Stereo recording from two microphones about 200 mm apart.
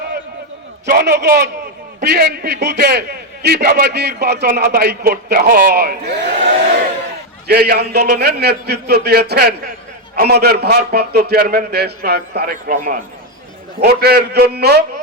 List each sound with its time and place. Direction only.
0.9 s a man's voice: 50° right (ahead or behind)
7.4 s a man's voice: 50° right (ahead or behind)